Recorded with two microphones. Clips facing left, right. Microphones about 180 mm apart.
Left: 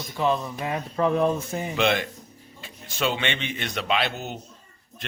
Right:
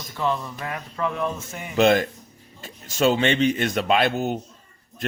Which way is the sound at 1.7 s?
45° right (ahead or behind).